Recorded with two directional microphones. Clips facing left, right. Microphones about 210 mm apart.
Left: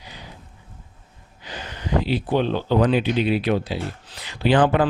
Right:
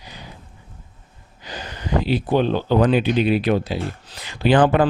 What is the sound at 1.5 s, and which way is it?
Speech, 40° right (ahead or behind).